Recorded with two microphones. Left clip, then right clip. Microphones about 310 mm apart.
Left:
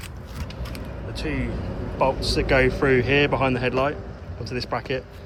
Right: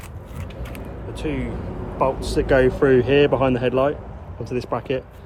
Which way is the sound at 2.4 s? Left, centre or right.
Right.